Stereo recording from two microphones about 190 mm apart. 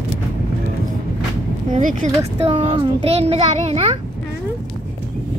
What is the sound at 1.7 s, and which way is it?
A child's voice, 40° right (ahead or behind).